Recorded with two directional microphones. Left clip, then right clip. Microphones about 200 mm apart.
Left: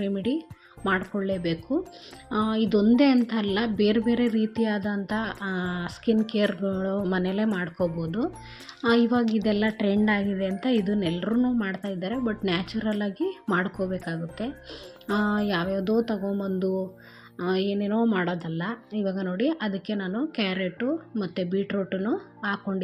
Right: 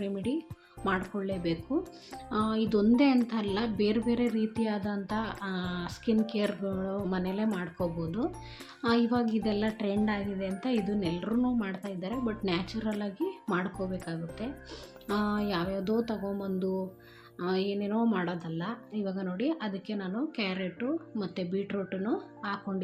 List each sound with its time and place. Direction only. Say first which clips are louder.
0.0 s a woman's voice: left 5 dB; 20° left (ahead or behind)